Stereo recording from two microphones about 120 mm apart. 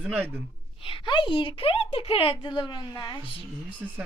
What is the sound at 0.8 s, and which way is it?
A woman's voice, 45° left (ahead or behind).